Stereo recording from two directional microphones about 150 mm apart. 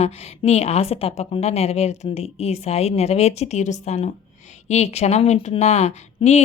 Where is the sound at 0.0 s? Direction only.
45° left (ahead or behind).